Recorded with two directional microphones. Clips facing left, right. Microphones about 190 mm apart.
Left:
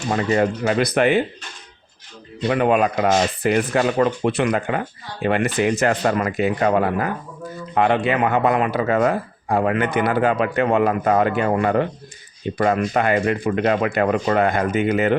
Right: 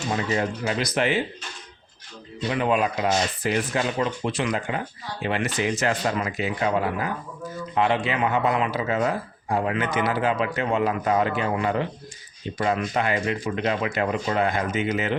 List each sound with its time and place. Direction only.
0.1 s speech: 55° left (ahead or behind)
2.5 s speech: 55° left (ahead or behind)